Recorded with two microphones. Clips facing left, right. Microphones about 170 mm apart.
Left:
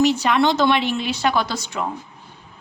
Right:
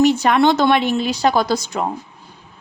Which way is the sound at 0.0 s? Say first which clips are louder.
Right 3 dB; 50° right (ahead or behind).